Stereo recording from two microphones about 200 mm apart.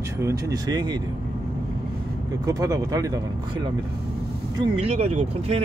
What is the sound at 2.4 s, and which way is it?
Speech, 15° right (ahead or behind).